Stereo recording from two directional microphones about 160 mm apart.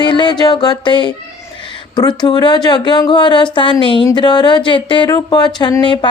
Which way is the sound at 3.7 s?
30° left (ahead or behind).